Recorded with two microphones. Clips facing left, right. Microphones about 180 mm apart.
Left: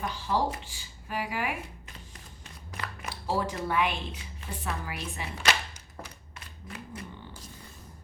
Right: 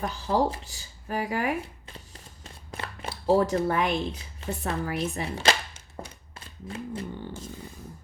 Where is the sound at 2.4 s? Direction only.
30° right (ahead or behind).